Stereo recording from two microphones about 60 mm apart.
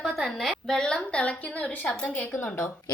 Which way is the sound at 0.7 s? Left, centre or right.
Centre.